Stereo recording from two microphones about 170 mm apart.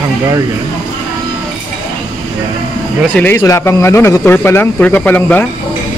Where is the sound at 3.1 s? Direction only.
10° left (ahead or behind).